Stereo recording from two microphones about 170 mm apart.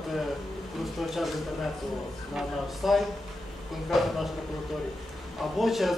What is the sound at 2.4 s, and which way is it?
Speech, centre (ahead or behind).